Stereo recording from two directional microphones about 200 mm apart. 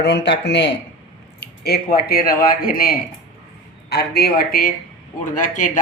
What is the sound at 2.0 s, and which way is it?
A man's voice, 45° left (ahead or behind).